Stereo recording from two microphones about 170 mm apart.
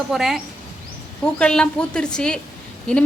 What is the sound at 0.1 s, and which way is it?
A woman's voice, 5° right (ahead or behind).